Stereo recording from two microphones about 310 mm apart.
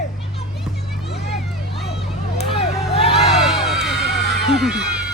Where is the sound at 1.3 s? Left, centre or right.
Centre.